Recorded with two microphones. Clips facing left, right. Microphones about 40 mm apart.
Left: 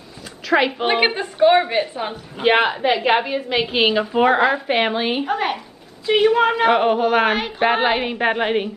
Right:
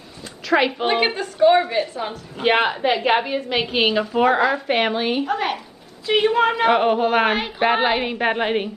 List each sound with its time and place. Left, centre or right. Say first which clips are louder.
0.5 s speech: left 1 dB; centre
0.8 s a woman's voice: left 2 dB; centre
2.4 s a woman's voice: left 2 dB; centre